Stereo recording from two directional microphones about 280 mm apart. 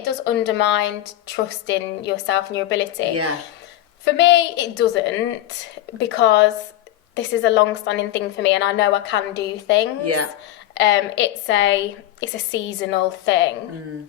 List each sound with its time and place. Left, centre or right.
0.0 s a woman's voice: left
4.2 s a woman's voice: left